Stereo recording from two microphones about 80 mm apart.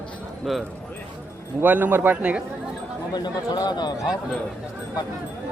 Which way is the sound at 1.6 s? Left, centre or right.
Right.